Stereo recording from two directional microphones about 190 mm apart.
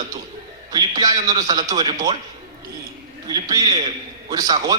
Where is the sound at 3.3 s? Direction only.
20° right (ahead or behind).